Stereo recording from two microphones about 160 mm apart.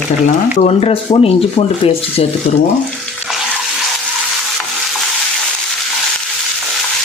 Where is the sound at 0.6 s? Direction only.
40° left (ahead or behind).